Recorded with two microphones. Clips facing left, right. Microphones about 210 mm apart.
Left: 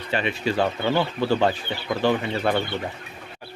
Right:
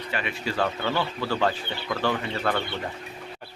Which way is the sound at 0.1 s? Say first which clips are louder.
Left 7 dB; 25° left (ahead or behind).